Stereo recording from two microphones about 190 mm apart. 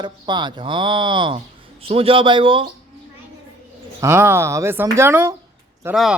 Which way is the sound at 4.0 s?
15° right (ahead or behind).